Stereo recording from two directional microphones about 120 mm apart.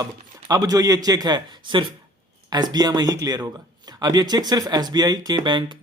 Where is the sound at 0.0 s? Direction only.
30° right (ahead or behind).